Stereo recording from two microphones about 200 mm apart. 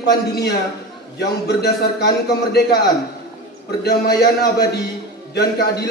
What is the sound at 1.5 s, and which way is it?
A man's voice, 55° left (ahead or behind).